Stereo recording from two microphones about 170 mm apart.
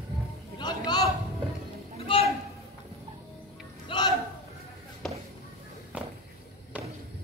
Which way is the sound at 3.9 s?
25° left (ahead or behind).